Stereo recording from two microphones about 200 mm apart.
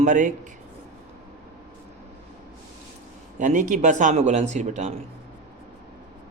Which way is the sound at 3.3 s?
40° right (ahead or behind).